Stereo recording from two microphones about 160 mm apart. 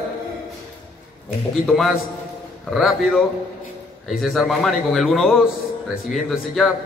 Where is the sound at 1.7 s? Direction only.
Centre (ahead or behind).